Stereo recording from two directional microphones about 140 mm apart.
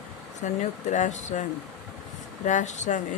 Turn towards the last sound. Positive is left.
turn(degrees=60)  # may be behind; listen again after turning